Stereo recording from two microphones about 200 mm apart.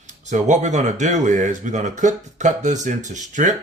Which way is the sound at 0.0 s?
35° right (ahead or behind).